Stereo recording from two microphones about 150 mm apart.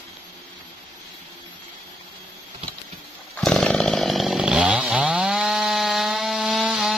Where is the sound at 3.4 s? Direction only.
5° left (ahead or behind).